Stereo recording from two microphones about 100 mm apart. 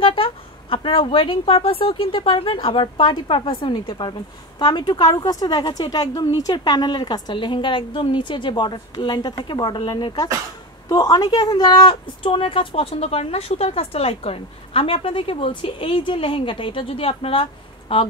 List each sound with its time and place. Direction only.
0.0 s a woman's voice: 60° left (ahead or behind)